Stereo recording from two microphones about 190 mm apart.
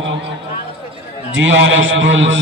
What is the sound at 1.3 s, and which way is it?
A man's voice, 80° right.